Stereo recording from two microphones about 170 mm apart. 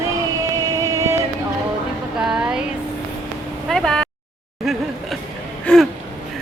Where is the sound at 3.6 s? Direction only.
5° left (ahead or behind).